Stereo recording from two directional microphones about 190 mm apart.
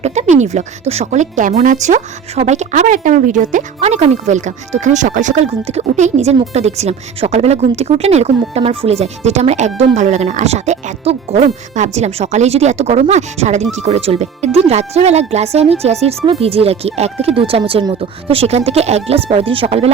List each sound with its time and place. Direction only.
0.0 s speech: 35° right (ahead or behind)